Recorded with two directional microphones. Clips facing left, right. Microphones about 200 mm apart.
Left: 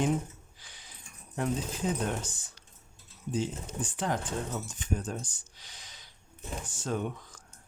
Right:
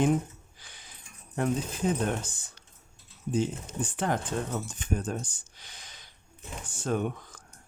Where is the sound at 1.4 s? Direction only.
55° right (ahead or behind).